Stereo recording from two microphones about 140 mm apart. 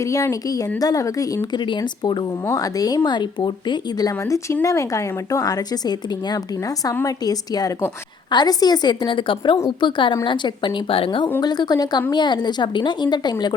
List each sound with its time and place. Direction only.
0.0 s a woman's voice: 25° left (ahead or behind)